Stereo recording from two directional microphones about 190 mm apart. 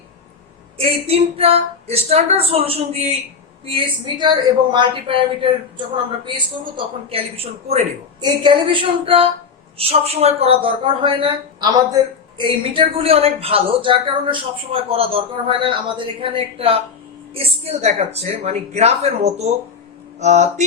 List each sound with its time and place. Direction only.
0.8 s a woman's voice: 30° right (ahead or behind)